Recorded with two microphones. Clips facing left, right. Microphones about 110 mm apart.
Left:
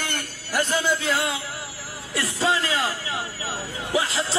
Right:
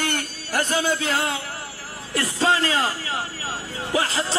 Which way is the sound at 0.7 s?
15° right (ahead or behind).